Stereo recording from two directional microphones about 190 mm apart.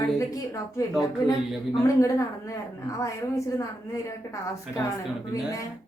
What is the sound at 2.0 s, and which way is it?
A woman's voice, 15° left (ahead or behind).